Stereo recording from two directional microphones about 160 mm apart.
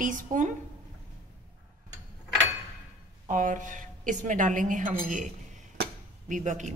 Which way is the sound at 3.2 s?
55° right (ahead or behind).